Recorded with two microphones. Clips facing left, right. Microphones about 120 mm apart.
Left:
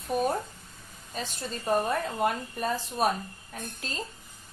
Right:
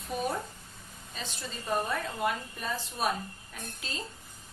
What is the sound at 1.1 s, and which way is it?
A woman's voice, 45° left (ahead or behind).